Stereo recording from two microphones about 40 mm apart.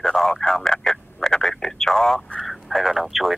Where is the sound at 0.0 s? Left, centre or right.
Centre.